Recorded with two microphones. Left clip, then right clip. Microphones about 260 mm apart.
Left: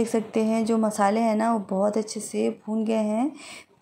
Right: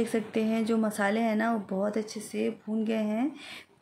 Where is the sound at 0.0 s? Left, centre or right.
Centre.